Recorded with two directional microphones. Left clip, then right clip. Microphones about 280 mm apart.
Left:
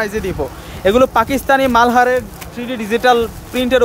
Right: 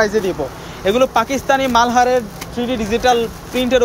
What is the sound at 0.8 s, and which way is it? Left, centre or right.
Speech, centre.